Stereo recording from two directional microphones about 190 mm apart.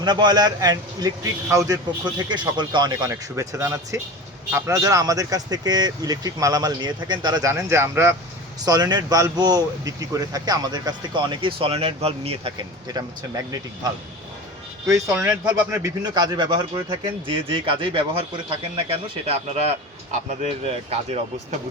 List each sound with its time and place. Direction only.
0.0 s speech: 20° right (ahead or behind)
15.1 s speech: 10° right (ahead or behind); by 21.2 s 35° right (ahead or behind)